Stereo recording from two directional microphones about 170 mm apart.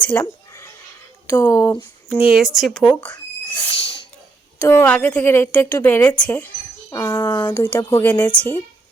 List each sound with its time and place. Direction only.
0.0 s a sound: 10° left (ahead or behind)
1.3 s a woman's voice: 10° left (ahead or behind)
2.0 s speech: 5° right (ahead or behind); by 3.6 s 10° left (ahead or behind)
3.6 s owl: 30° left (ahead or behind)
4.6 s a woman's voice: 10° left (ahead or behind)